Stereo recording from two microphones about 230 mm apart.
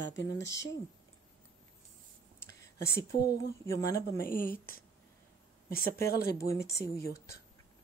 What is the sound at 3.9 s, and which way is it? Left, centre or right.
Speech, centre.